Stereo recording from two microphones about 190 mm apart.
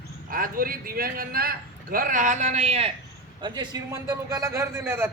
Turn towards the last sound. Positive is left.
turn(degrees=-10)  # may be behind; listen again after turning